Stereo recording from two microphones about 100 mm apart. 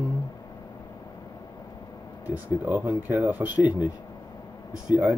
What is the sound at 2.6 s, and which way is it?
Speech, 15° right (ahead or behind).